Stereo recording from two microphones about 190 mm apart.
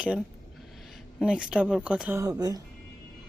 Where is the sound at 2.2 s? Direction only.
20° right (ahead or behind).